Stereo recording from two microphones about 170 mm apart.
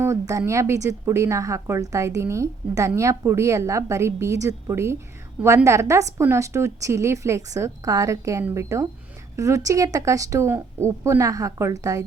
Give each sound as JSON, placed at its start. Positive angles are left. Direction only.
{"t": 0.0, "sound": "a woman's voice", "side_deg": -20}